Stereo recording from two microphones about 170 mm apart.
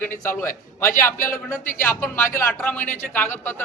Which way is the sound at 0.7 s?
15° left (ahead or behind).